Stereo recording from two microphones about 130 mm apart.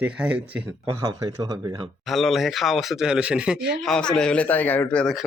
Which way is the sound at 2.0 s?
Centre (ahead or behind).